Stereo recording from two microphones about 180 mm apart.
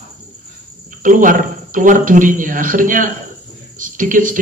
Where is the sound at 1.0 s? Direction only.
45° right (ahead or behind).